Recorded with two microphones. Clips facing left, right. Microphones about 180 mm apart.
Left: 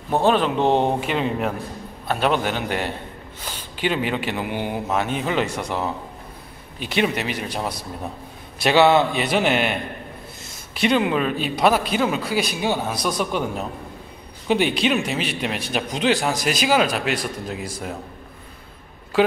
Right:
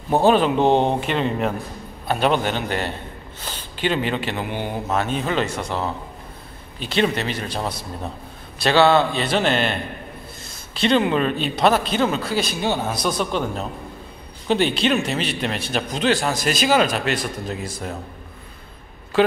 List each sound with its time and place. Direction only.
0.1 s a man's voice: 5° right (ahead or behind)